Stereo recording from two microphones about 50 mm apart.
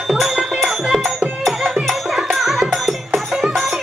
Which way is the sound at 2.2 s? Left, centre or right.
Centre.